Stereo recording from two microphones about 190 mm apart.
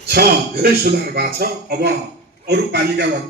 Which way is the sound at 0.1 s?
55° right (ahead or behind).